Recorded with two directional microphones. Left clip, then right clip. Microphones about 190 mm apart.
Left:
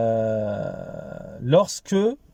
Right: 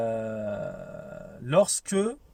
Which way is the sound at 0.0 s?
25° left (ahead or behind).